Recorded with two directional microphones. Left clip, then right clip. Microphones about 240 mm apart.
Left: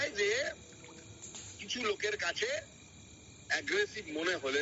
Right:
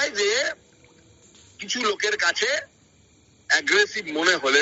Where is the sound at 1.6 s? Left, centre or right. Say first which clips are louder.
Right 11 dB; right.